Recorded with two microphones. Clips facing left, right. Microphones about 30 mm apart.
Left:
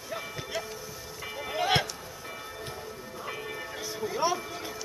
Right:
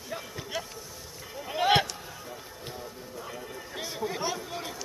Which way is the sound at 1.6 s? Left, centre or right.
Centre.